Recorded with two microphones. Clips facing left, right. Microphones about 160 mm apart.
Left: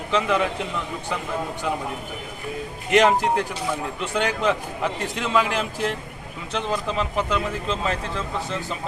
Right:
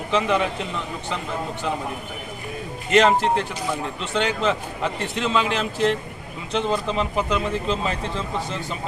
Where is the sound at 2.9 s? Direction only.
10° left (ahead or behind).